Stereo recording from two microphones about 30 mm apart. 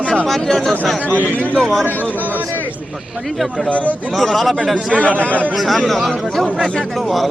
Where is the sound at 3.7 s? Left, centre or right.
Left.